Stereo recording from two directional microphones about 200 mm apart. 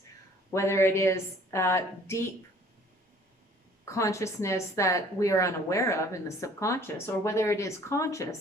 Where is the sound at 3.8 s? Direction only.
15° left (ahead or behind).